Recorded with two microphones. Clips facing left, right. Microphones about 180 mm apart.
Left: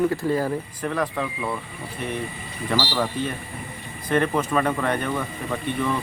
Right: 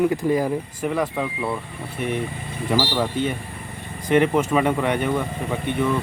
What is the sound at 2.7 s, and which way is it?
Speech, 15° right (ahead or behind).